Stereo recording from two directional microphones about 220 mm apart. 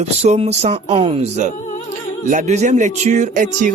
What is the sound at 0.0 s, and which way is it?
Speech, 30° right (ahead or behind).